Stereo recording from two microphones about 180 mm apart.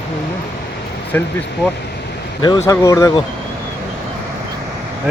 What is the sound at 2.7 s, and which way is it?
Speech, 15° left (ahead or behind).